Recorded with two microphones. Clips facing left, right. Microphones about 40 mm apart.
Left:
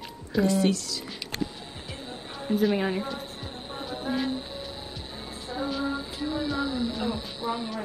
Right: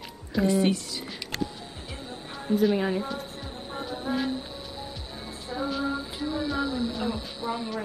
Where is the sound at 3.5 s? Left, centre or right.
Left.